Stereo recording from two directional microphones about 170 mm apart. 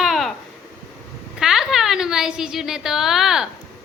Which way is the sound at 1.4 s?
Centre (ahead or behind).